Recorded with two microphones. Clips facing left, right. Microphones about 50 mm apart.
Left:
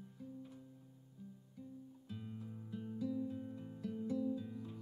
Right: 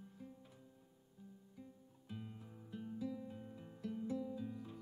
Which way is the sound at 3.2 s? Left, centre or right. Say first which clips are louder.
Left 7 dB; centre.